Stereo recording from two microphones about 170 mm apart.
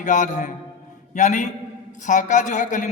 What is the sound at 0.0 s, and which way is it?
Speech, 45° left (ahead or behind).